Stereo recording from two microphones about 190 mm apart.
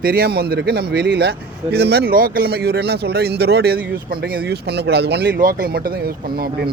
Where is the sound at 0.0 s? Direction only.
50° right (ahead or behind).